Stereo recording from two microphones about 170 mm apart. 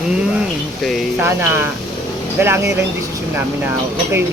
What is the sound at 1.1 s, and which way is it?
Speech, 15° right (ahead or behind).